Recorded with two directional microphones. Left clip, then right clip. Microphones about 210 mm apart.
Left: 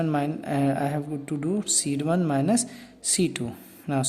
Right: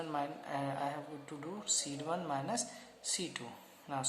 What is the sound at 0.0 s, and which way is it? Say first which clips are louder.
Speech: left 12 dB; 50° left (ahead or behind).